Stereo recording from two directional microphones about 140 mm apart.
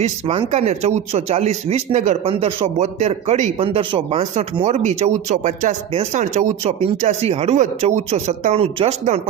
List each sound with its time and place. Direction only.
0.0 s speech: 45° right (ahead or behind); by 2.1 s 60° right (ahead or behind)
2.2 s speech: 40° right (ahead or behind)
3.6 s speech: 40° right (ahead or behind)
4.6 s speech: 55° right (ahead or behind)